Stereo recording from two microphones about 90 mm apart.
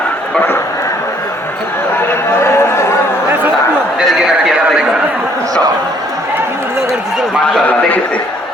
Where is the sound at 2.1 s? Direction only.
30° left (ahead or behind).